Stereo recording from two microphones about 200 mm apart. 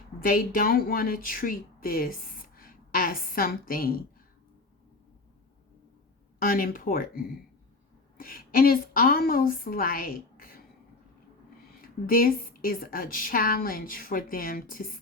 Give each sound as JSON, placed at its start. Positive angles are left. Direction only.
{"t": 0.2, "sound": "a woman's voice", "side_deg": 45}
{"t": 6.4, "sound": "a woman's voice", "side_deg": 45}
{"t": 11.8, "sound": "a woman's voice", "side_deg": 45}